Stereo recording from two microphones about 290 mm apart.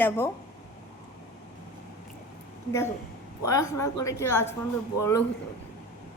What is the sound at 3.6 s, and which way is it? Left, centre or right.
Speech, left.